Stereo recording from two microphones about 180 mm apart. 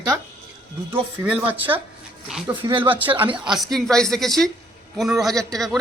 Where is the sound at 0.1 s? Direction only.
10° right (ahead or behind).